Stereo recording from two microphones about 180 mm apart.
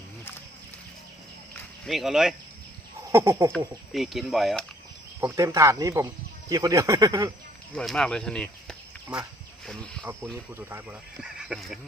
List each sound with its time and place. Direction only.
1.9 s speech: centre (ahead or behind)
3.1 s speech: 15° right (ahead or behind)
3.9 s speech: centre (ahead or behind)
5.2 s speech: 15° right (ahead or behind)
7.8 s speech: 5° left (ahead or behind)
10.5 s speech: 10° right (ahead or behind)